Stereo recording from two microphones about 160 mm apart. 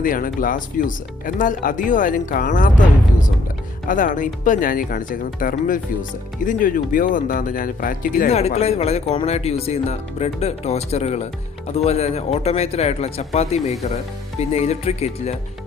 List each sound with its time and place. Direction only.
0.0 s speech: 60° left (ahead or behind)
8.3 s speech: 40° left (ahead or behind)